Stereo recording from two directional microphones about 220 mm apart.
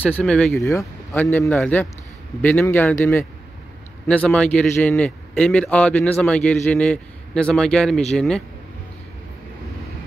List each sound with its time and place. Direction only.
0.1 s a man's voice: 5° left (ahead or behind)
0.7 s a man's voice: 15° left (ahead or behind)